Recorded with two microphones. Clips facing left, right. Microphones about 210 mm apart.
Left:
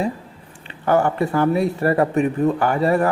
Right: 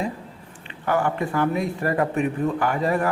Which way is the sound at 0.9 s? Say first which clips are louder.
Left 5 dB; 40° left (ahead or behind).